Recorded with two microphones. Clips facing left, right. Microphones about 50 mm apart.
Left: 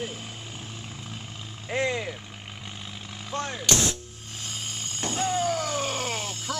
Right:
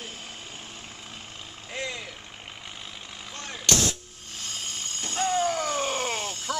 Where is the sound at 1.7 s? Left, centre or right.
Left.